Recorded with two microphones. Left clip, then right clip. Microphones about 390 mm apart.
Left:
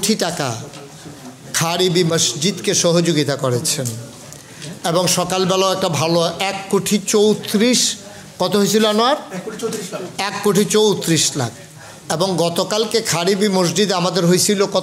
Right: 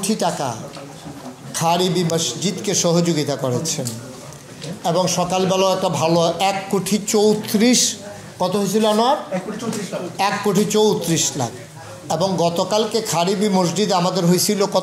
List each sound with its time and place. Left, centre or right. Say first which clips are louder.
0.0 s a man's voice: left 1 dB; left
4.8 s a man's voice: left 1 dB; left
8.4 s a man's voice: left 3 dB; left
10.1 s a man's voice: left 1 dB; left